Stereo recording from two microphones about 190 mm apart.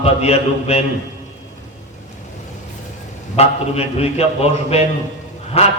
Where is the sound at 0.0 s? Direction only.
35° left (ahead or behind).